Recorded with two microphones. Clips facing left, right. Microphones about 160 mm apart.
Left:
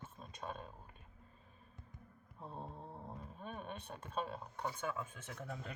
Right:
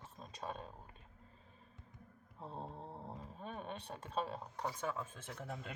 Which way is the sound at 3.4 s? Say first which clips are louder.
Right 1 dB; 30° right (ahead or behind).